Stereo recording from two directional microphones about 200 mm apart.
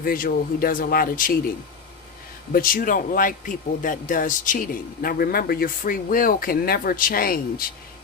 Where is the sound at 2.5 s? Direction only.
45° left (ahead or behind).